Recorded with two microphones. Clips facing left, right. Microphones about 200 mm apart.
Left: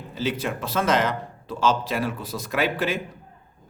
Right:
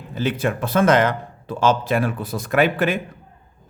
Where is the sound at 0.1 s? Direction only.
55° right (ahead or behind).